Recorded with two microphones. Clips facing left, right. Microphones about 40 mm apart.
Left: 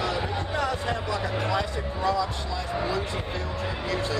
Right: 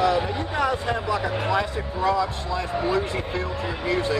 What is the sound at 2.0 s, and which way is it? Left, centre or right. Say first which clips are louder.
Speech: right 4 dB; right.